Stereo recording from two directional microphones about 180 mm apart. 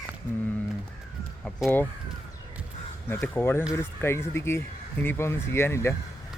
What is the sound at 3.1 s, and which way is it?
Speech, 15° left (ahead or behind).